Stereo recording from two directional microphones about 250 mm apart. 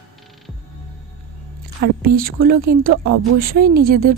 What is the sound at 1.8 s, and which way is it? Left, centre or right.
A woman's voice, right.